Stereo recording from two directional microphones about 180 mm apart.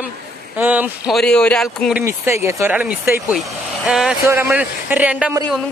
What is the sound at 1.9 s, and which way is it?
Speech, 15° right (ahead or behind).